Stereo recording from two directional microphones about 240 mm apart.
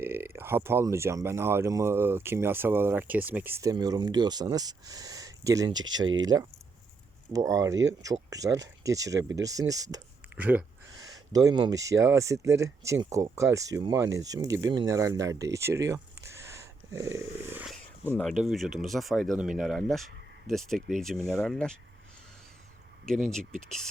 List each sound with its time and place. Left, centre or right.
0.0 s speech: centre
20.7 s speech: right
21.0 s speech: centre
23.0 s speech: centre